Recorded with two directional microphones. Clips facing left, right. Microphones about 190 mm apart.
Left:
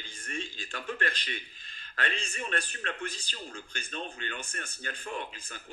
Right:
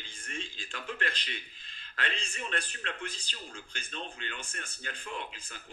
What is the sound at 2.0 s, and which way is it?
A man's voice, 45° left (ahead or behind).